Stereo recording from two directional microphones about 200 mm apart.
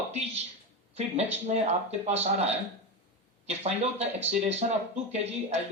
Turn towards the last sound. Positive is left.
turn(degrees=-30)  # may be behind; listen again after turning